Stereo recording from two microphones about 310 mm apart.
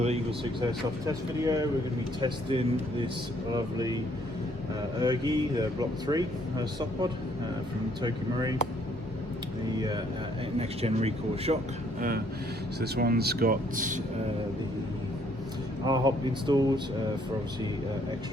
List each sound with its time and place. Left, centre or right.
0.0 s speech: right
4.9 s speech: centre
9.7 s speech: centre
15.8 s speech: centre